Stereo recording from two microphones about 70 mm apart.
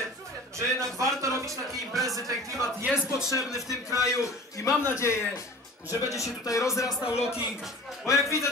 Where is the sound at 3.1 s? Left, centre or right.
Left.